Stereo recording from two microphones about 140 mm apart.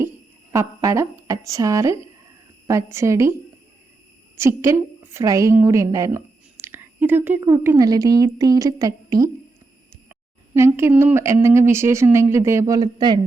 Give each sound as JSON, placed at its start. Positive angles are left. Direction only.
{"t": 0.5, "sound": "speech", "side_deg": -20}
{"t": 4.4, "sound": "speech", "side_deg": -20}